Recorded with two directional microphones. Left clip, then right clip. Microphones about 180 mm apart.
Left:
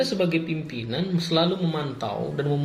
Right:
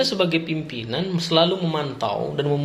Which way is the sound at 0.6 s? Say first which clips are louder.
Right 3 dB; 50° right (ahead or behind).